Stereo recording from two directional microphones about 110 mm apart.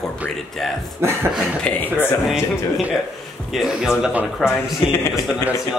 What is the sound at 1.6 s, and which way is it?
Speech, 15° left (ahead or behind).